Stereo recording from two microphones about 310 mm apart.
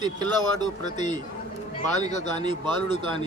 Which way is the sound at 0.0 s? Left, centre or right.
Centre.